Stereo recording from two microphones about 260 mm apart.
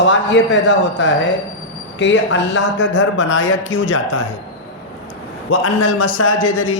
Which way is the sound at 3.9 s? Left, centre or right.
Left.